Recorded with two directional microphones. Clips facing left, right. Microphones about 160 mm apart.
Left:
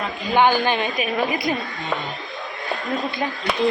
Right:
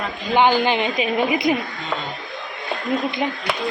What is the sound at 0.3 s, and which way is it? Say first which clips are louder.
A woman's voice: right 1 dB; 15° right (ahead or behind).